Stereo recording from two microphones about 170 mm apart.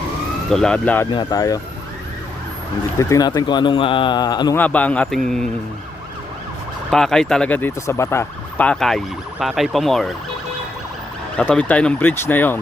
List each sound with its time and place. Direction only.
0.5 s speech: 5° left (ahead or behind)
1.1 s speech: 25° left (ahead or behind)
3.0 s speech: 20° left (ahead or behind)
4.5 s speech: 10° left (ahead or behind)
6.9 s speech: 5° left (ahead or behind)
11.3 s speech: 5° left (ahead or behind)